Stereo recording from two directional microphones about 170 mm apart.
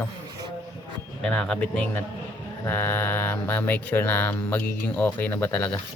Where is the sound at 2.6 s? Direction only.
10° left (ahead or behind).